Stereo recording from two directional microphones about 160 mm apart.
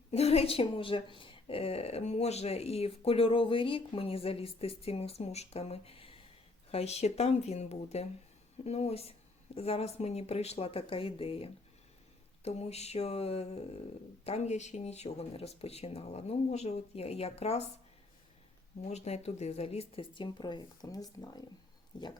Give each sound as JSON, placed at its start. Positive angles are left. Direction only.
{"t": 0.1, "sound": "speech", "side_deg": 40}
{"t": 18.8, "sound": "speech", "side_deg": 45}